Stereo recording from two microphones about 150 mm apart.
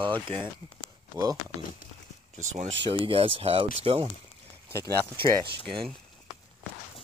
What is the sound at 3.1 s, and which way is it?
Speech, 40° right (ahead or behind).